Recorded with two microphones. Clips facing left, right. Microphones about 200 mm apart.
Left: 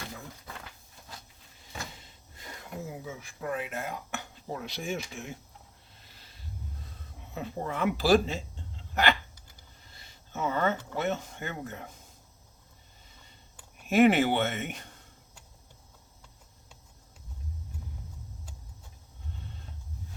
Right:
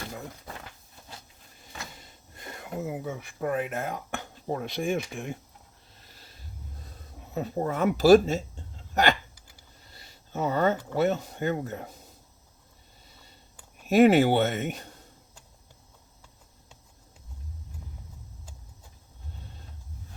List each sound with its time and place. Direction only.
2.0 s speech: 55° right (ahead or behind)
7.3 s speech: 40° right (ahead or behind)
13.8 s speech: 40° right (ahead or behind)